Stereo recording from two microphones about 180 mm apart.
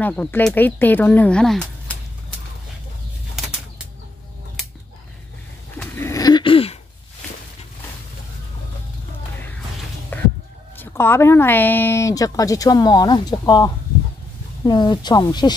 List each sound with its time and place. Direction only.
0.0 s speech: 10° left (ahead or behind)
5.8 s a sound: 15° left (ahead or behind); by 6.8 s 30° left (ahead or behind)
10.1 s chicken: 10° left (ahead or behind)
10.8 s a woman's voice: 10° left (ahead or behind)